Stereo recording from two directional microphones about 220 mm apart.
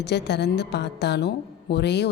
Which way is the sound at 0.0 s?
50° left (ahead or behind).